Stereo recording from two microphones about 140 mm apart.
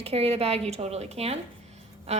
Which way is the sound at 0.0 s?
45° right (ahead or behind).